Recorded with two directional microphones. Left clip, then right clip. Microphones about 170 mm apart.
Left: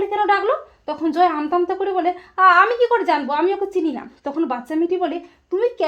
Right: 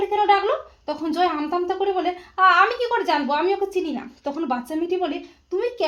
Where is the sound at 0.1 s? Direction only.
30° left (ahead or behind).